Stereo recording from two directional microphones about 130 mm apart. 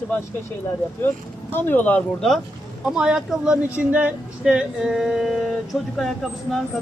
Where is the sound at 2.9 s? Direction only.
5° right (ahead or behind).